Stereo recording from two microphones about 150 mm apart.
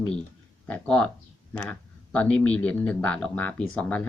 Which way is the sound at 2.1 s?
10° left (ahead or behind).